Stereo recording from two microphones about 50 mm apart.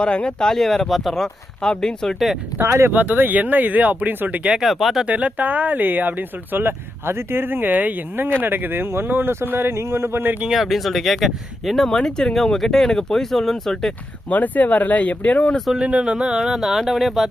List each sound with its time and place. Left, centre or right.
0.0 s speech: centre
2.1 s speech: centre
2.6 s speech: right
2.9 s speech: right
4.6 s speech: centre
5.0 s speech: right
10.5 s speech: centre
11.9 s speech: centre
14.3 s speech: left
15.9 s speech: right
16.5 s speech: centre